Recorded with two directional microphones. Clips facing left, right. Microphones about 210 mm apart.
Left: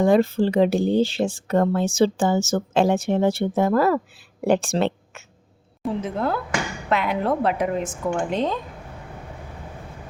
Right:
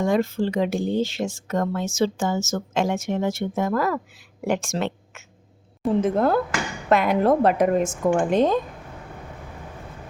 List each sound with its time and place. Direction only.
0.0 s speech: 35° left (ahead or behind)
6.0 s a woman's voice: 45° right (ahead or behind)